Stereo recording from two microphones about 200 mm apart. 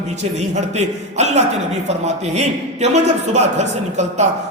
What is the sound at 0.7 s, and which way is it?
A man's voice, 35° right (ahead or behind).